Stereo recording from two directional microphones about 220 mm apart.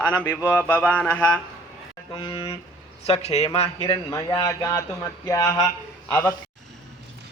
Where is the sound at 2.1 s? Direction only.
20° left (ahead or behind).